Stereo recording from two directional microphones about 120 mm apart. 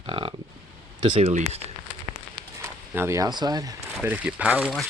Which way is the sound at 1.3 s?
80° right.